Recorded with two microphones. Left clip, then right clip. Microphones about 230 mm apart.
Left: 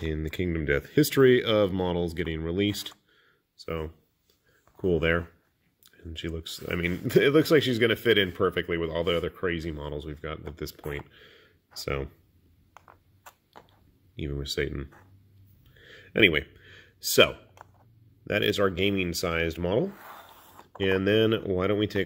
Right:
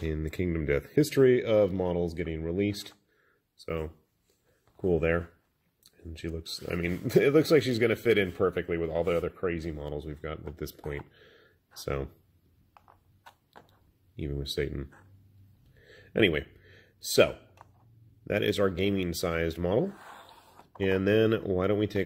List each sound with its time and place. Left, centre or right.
0.0 s speech: centre
3.6 s speech: centre
4.9 s speech: centre
9.8 s speech: centre
14.1 s speech: centre
15.7 s a sound: centre
18.2 s speech: centre